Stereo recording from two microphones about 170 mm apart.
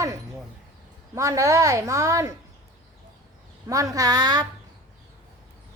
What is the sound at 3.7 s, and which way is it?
Speech, 20° right (ahead or behind).